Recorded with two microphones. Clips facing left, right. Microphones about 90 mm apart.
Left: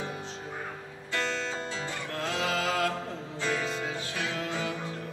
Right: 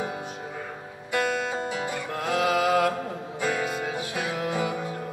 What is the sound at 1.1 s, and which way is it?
Music, 15° right (ahead or behind).